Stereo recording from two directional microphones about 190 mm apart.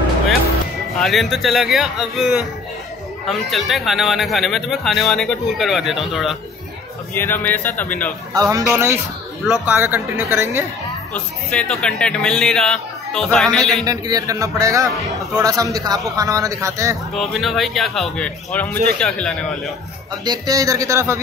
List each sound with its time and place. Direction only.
0.9 s speech: centre (ahead or behind)
7.2 s speech: 10° left (ahead or behind)
8.3 s a man's voice: 15° right (ahead or behind)
11.1 s speech: 5° left (ahead or behind)
13.8 s a man's voice: 20° right (ahead or behind)
17.1 s speech: centre (ahead or behind)
20.2 s a man's voice: 20° right (ahead or behind)